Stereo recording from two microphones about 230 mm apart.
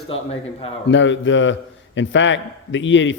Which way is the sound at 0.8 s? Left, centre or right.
Left.